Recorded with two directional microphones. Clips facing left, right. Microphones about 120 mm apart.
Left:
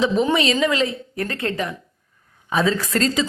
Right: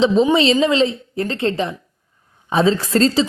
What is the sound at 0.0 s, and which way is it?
A woman's voice, 20° right (ahead or behind).